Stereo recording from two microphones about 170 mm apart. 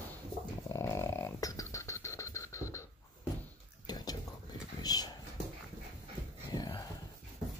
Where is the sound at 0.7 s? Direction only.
15° left (ahead or behind).